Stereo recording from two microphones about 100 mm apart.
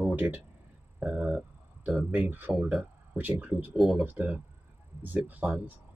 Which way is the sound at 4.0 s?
15° right (ahead or behind).